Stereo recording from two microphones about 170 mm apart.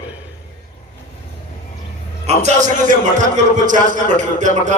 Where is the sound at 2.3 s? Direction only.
45° right (ahead or behind).